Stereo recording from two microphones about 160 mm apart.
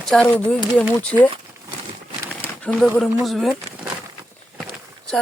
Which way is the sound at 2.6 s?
Centre (ahead or behind).